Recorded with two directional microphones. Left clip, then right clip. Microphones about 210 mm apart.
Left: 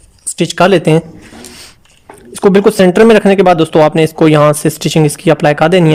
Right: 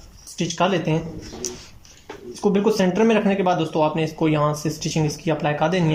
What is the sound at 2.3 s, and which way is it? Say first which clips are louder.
Speech: left 12 dB; 55° left (ahead or behind).